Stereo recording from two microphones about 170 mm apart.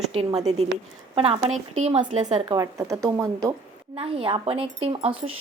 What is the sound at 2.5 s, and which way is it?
Speech, 20° right (ahead or behind).